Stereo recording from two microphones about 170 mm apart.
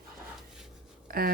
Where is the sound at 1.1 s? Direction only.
60° right (ahead or behind).